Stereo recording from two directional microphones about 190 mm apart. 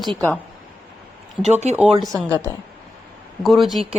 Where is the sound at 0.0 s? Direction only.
5° left (ahead or behind).